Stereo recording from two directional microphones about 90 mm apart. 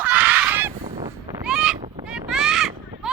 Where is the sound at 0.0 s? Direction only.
20° right (ahead or behind).